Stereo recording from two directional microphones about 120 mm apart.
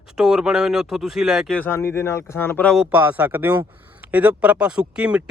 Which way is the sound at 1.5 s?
15° left (ahead or behind).